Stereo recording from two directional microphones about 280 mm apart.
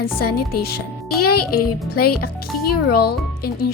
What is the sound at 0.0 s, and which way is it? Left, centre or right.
Speech, left.